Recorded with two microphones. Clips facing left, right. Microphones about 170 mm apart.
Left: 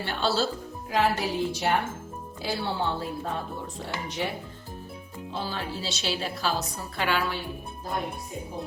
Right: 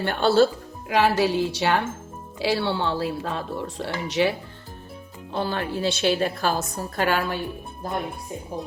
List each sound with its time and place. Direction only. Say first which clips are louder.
0.0 s speech: right 8 dB; 55° right (ahead or behind)
0.9 s a woman's voice: right 5 dB; 80° right
5.3 s a woman's voice: right 7 dB; 60° right (ahead or behind)